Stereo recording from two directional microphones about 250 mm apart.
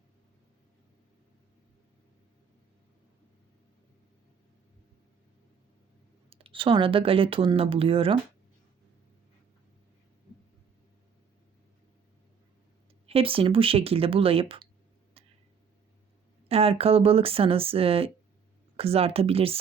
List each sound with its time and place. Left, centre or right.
6.3 s speech: right
13.1 s speech: right
15.2 s a sound: right
16.5 s speech: right